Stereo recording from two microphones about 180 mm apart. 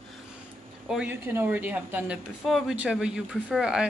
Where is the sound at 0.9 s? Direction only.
10° right (ahead or behind).